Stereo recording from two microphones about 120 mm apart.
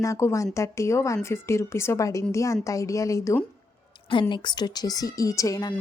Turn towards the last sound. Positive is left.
turn(degrees=30)  # may be behind; listen again after turning